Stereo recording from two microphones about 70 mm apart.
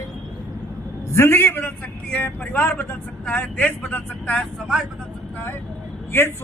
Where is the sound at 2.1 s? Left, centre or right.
Left.